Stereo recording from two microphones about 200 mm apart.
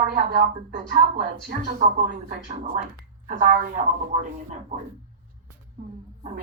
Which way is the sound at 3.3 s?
40° right (ahead or behind).